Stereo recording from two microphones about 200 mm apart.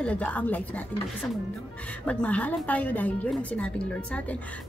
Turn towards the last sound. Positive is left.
turn(degrees=5)  # may be behind; listen again after turning